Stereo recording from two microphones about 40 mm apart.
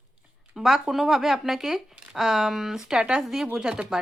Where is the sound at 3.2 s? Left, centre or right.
Centre.